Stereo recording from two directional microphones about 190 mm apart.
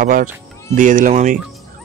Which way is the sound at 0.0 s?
45° right (ahead or behind).